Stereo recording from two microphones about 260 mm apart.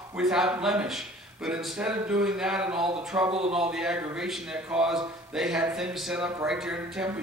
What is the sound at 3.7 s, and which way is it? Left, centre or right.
Speech, centre.